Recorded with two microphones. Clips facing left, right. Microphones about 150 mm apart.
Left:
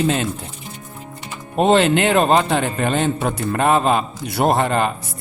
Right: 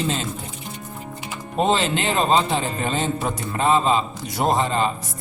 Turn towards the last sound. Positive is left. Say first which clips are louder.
# left 3 dB
turn(degrees=60)  # may be behind; listen again after turning